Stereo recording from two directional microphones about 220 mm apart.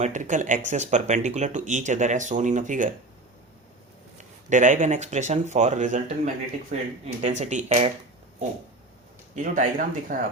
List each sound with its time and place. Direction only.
0.0 s speech: 35° right (ahead or behind)
4.2 s speech: 35° right (ahead or behind)
9.3 s speech: 35° right (ahead or behind)